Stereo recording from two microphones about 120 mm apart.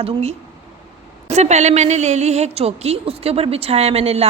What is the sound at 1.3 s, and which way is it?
A woman's voice, 70° right (ahead or behind).